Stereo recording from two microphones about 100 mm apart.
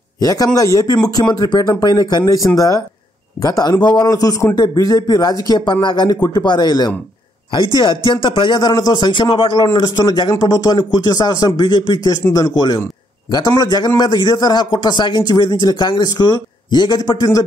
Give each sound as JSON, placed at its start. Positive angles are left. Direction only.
{"t": 0.2, "sound": "a man's voice", "side_deg": 35}
{"t": 8.0, "sound": "a man's voice", "side_deg": 55}